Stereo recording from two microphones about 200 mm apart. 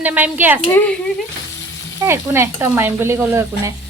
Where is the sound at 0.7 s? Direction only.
10° left (ahead or behind).